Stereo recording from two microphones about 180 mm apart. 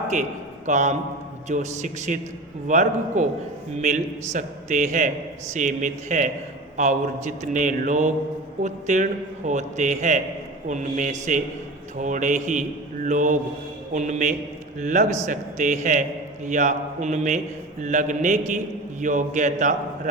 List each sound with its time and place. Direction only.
0.1 s a man's voice: 40° right (ahead or behind)